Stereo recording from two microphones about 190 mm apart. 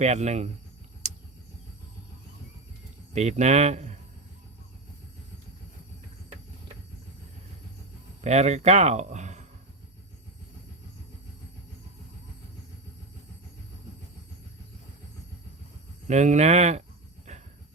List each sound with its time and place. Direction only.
0.0 s speech: 35° right (ahead or behind)
1.0 s vehicle: 35° right (ahead or behind)
3.1 s speech: 35° right (ahead or behind)
8.2 s speech: 35° right (ahead or behind)
16.0 s speech: 40° right (ahead or behind)